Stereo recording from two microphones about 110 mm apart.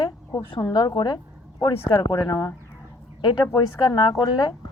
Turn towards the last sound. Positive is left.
turn(degrees=40)  # may be behind; listen again after turning